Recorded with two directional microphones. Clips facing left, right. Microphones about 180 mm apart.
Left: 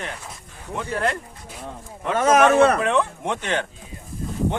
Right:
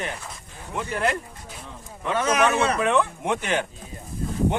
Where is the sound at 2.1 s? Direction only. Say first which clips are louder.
Left 6 dB; 45° left (ahead or behind).